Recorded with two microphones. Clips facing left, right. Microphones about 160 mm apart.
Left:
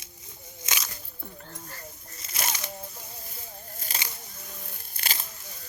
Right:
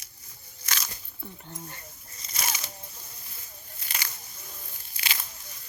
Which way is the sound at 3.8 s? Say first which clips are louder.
Even; 45° left (ahead or behind).